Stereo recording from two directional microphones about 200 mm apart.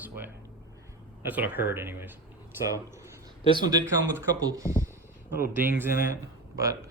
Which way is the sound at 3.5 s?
20° right (ahead or behind).